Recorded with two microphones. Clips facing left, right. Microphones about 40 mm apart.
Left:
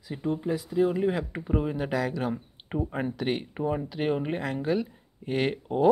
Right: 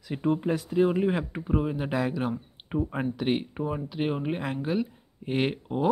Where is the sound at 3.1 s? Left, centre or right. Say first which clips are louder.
Right 3 dB; centre.